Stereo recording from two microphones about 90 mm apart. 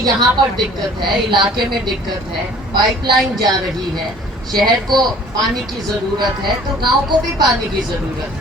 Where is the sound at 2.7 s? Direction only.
55° right (ahead or behind).